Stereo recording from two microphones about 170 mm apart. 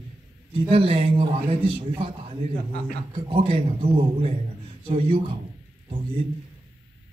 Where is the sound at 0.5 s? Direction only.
30° right (ahead or behind).